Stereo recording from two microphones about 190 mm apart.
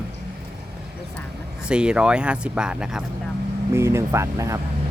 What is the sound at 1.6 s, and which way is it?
Speech, 5° right (ahead or behind).